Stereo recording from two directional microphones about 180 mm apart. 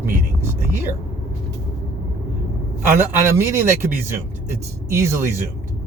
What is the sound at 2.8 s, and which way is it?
A man's voice, 15° right (ahead or behind).